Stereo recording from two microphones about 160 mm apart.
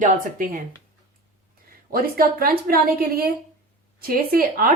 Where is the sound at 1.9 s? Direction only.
65° right (ahead or behind).